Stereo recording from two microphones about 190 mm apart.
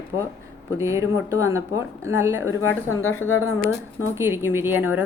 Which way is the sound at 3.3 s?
90° left.